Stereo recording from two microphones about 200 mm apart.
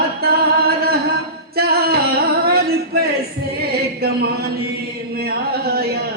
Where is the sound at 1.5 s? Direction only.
50° right (ahead or behind).